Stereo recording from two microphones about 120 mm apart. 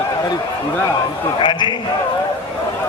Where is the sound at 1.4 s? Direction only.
40° left (ahead or behind).